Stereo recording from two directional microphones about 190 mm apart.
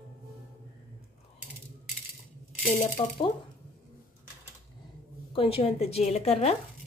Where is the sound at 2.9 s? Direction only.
30° left (ahead or behind).